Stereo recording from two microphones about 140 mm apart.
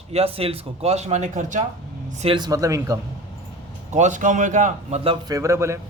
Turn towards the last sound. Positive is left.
turn(degrees=-20)  # may be behind; listen again after turning